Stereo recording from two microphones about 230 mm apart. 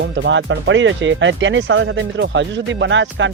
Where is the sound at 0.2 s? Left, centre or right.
Right.